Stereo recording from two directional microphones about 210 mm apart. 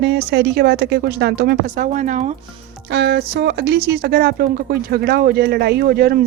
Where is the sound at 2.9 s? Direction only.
50° right (ahead or behind).